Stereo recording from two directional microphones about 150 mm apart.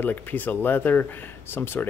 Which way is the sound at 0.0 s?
10° left (ahead or behind).